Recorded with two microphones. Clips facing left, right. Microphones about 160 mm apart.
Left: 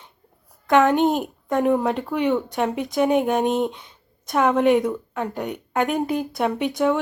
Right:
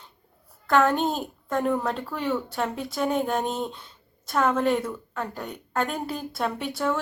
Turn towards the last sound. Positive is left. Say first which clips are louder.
# left 6 dB
turn(degrees=15)  # may be behind; listen again after turning